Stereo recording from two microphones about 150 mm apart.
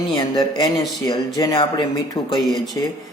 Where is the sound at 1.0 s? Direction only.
25° left (ahead or behind).